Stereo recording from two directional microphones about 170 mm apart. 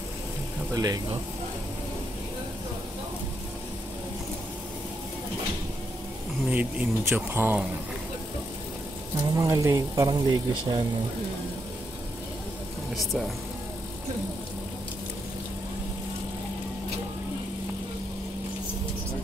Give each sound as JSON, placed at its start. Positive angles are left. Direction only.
{"t": 0.7, "sound": "speech", "side_deg": -20}
{"t": 6.5, "sound": "speech", "side_deg": -10}
{"t": 9.3, "sound": "speech", "side_deg": -20}
{"t": 12.9, "sound": "speech", "side_deg": 0}